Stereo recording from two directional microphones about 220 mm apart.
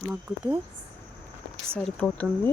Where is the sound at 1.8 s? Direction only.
5° left (ahead or behind).